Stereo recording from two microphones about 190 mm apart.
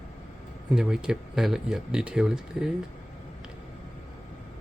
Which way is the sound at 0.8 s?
5° right (ahead or behind).